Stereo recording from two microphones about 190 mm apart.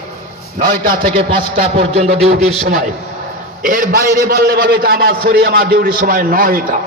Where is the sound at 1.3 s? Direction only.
55° right (ahead or behind).